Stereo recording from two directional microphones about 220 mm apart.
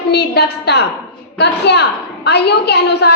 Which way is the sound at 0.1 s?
45° left (ahead or behind).